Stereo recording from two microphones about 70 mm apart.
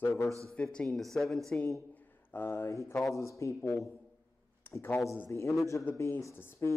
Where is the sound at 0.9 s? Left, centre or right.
Centre.